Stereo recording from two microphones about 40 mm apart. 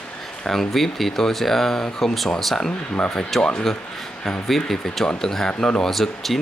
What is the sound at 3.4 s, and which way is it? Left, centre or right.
Speech, left.